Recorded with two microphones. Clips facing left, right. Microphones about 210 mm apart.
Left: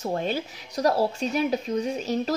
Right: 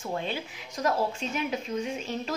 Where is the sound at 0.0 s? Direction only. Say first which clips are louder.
Left 5 dB; 40° left (ahead or behind).